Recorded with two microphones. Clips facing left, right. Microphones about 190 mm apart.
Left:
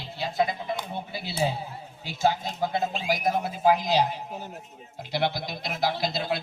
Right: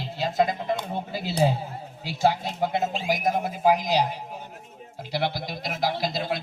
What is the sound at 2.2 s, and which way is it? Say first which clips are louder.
Speech: right 2 dB; 30° right (ahead or behind).